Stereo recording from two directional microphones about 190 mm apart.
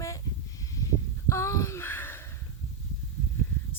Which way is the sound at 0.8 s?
15° left (ahead or behind).